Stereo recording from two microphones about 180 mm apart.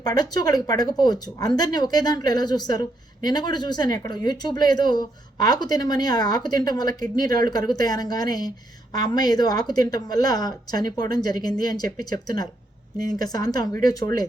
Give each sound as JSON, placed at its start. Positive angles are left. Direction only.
{"t": 0.0, "sound": "speech", "side_deg": 20}